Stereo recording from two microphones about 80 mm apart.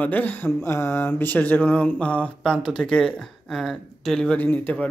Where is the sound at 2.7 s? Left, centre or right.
Centre.